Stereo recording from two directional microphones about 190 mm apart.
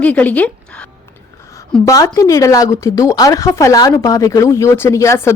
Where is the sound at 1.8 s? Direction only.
15° left (ahead or behind).